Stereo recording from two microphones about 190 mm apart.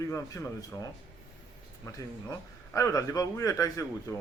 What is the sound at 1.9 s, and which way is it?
A man's voice, 15° left (ahead or behind).